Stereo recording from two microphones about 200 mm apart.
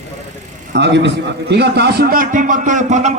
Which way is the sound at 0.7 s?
60° right (ahead or behind).